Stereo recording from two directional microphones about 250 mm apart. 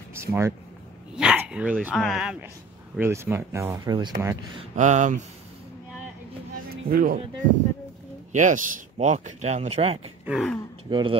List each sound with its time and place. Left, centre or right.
0.1 s speech: centre
4.6 s speech: right
6.7 s speech: right
8.3 s speech: right
10.2 s gasp: centre
10.9 s speech: centre